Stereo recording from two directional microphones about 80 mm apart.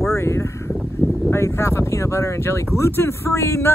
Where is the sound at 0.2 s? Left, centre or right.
Left.